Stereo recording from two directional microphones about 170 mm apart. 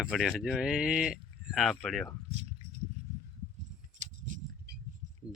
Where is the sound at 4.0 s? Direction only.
45° right (ahead or behind).